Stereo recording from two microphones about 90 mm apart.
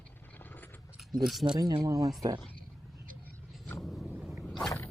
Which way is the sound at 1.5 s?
45° right (ahead or behind).